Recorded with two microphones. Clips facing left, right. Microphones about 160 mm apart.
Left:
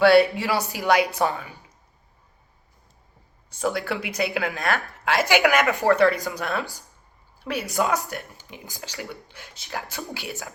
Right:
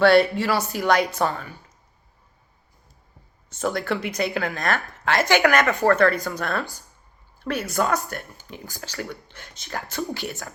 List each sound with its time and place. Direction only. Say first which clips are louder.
0.0 s a woman's voice: even; 10° left (ahead or behind)
3.5 s a woman's voice: right 1 dB; 10° left (ahead or behind)